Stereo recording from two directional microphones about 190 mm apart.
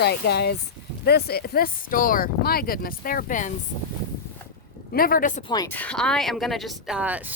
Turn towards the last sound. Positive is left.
turn(degrees=-10)  # may be behind; listen again after turning